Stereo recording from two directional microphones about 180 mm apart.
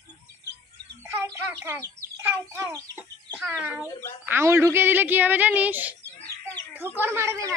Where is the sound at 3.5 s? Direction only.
10° right (ahead or behind).